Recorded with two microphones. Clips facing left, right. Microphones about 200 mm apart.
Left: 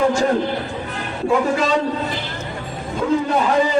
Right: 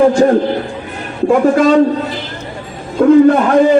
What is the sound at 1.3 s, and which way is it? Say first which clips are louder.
Speech: right 8 dB; 55° right (ahead or behind).